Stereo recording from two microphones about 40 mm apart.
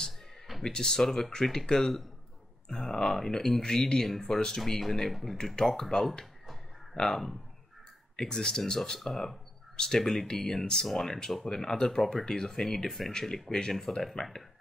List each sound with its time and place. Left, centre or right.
0.7 s speech: centre
3.1 s speech: centre
10.9 s speech: centre
11.4 s speech: centre
12.2 s speech: centre